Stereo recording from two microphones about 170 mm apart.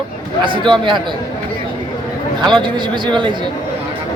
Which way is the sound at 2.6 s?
30° right (ahead or behind).